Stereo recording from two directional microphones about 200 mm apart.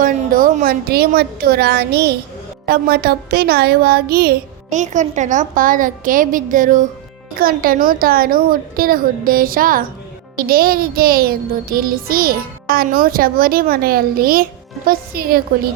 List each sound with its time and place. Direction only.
0.0 s speech: 45° right (ahead or behind)